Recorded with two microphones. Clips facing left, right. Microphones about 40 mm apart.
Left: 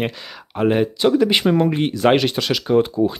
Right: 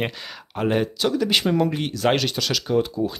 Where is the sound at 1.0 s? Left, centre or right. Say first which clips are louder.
Left 8 dB; left.